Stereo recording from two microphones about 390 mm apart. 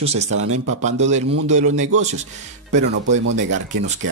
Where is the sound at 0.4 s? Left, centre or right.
Right.